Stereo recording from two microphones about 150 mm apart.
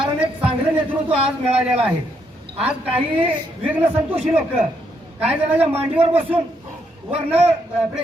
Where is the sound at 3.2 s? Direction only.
10° right (ahead or behind).